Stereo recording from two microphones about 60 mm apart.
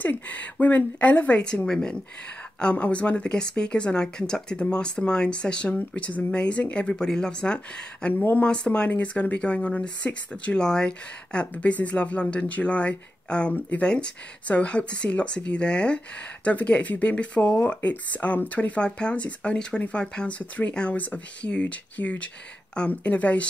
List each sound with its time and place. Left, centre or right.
0.0 s speech: left
8.1 s speech: left
8.5 s speech: centre